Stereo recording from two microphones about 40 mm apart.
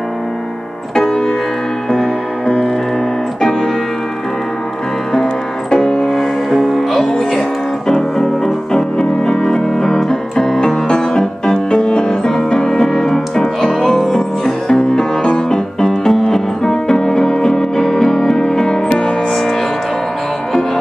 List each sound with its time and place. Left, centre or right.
0.9 s music: centre
5.7 s music: centre
8.7 s keyboard: centre
10.6 s music: centre